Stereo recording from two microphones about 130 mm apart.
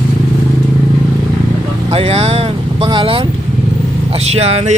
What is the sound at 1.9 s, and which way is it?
Speech, 50° right (ahead or behind).